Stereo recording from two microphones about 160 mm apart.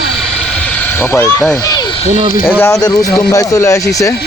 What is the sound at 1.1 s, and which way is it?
Speech, 15° left (ahead or behind).